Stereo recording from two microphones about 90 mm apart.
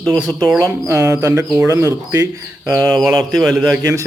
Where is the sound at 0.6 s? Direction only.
30° right (ahead or behind).